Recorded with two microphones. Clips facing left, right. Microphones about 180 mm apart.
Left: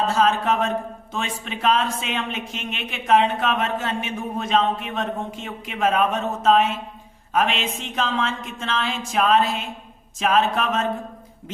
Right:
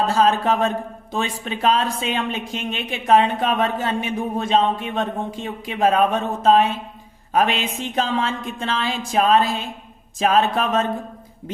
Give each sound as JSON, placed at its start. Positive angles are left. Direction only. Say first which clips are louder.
{"t": 0.1, "sound": "a man's voice", "louder": "right 2 dB", "side_deg": -35}